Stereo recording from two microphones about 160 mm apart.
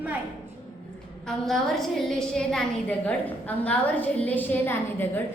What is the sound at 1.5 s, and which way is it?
A woman's voice, centre (ahead or behind).